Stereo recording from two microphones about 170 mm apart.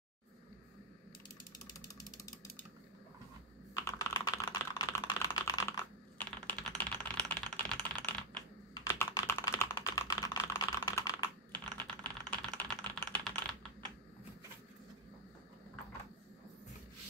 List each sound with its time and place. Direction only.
1.9 s a sound: 20° left (ahead or behind)
3.7 s typing: 20° left (ahead or behind)
11.7 s typing: 5° left (ahead or behind)